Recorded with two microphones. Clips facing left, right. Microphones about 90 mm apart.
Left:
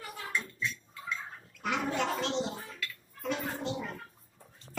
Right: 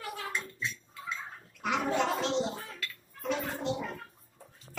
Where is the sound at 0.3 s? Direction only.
20° right (ahead or behind).